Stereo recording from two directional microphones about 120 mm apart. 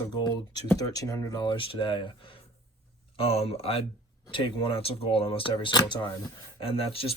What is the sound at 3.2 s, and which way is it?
Speech, 55° left (ahead or behind).